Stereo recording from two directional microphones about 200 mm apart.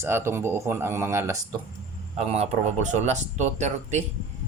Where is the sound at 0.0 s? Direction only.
10° right (ahead or behind).